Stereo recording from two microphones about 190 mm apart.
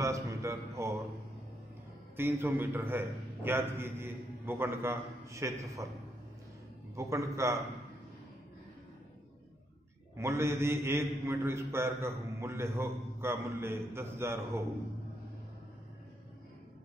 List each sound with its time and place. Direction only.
0.0 s a man's voice: 15° right (ahead or behind)
2.1 s a man's voice: 10° right (ahead or behind)
7.0 s a man's voice: 15° right (ahead or behind)
10.1 s a man's voice: 15° right (ahead or behind)